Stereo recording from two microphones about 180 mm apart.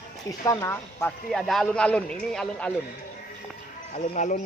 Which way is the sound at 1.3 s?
Centre (ahead or behind).